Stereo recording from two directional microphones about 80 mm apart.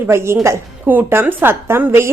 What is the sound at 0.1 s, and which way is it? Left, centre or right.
A woman's voice, right.